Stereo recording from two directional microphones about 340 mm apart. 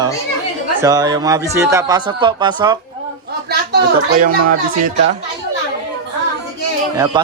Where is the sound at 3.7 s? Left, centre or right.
Right.